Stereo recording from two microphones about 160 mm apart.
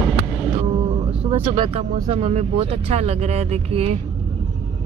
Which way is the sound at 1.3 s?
40° right (ahead or behind).